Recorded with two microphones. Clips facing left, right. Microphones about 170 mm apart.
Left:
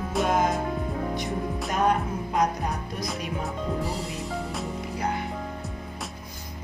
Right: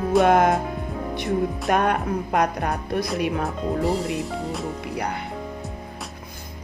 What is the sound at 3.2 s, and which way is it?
Speech, 70° right (ahead or behind).